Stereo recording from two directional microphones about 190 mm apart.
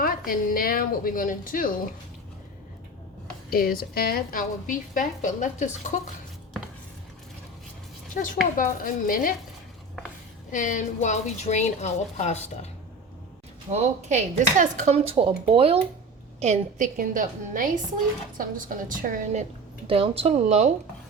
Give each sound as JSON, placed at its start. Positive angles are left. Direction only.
{"t": 0.0, "sound": "a woman's voice", "side_deg": 50}
{"t": 3.5, "sound": "a woman's voice", "side_deg": 50}
{"t": 8.5, "sound": "a woman's voice", "side_deg": 45}
{"t": 10.5, "sound": "a woman's voice", "side_deg": 40}
{"t": 13.7, "sound": "a woman's voice", "side_deg": -35}
{"t": 19.9, "sound": "speech", "side_deg": -30}